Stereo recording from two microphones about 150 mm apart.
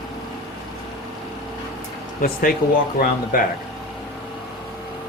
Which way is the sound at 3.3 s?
70° left (ahead or behind).